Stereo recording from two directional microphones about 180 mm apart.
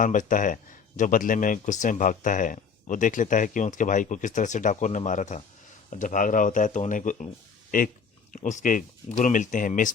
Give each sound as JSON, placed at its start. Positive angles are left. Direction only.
{"t": 0.0, "sound": "speech", "side_deg": 45}